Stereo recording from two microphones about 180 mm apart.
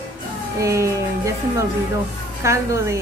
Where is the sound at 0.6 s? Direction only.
15° right (ahead or behind).